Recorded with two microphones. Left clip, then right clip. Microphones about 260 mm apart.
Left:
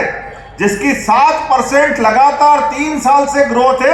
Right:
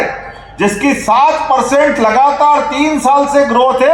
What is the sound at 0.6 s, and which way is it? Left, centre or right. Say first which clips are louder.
Speech: right 1 dB; centre.